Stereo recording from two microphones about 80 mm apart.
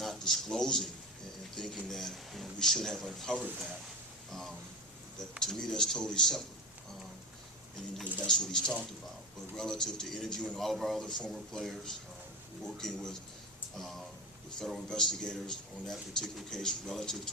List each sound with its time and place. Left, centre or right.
0.0 s a man's voice: centre
3.3 s speech: right
4.3 s a man's voice: centre
8.3 s a man's voice: centre